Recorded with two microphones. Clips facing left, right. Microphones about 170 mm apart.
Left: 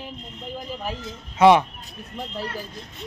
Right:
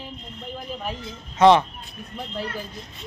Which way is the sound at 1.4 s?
10° left (ahead or behind).